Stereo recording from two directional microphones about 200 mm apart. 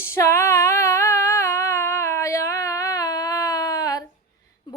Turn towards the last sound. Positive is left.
turn(degrees=20)  # may be behind; listen again after turning